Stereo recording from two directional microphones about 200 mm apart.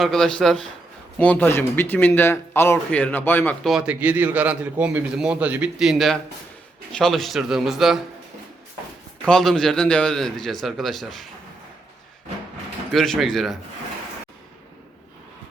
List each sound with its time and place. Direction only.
0.0 s a man's voice: centre (ahead or behind)
9.2 s a man's voice: centre (ahead or behind)
12.9 s a man's voice: centre (ahead or behind)